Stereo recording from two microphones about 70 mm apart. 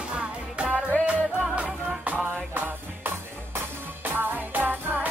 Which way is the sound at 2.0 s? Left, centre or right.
Right.